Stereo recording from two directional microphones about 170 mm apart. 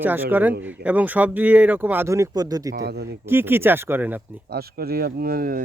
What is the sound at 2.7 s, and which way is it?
Speech, 75° right (ahead or behind).